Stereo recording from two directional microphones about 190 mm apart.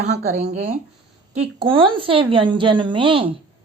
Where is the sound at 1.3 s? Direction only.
30° right (ahead or behind).